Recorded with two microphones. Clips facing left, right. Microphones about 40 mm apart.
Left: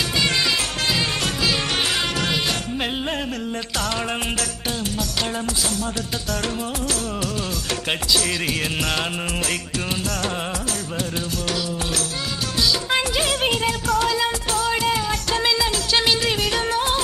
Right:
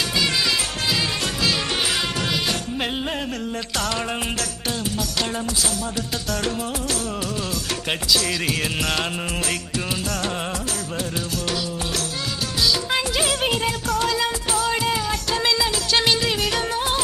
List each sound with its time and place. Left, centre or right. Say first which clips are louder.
3.8 s music: even; centre
7.9 s music: even; centre
12.6 s music of bollywood: even; centre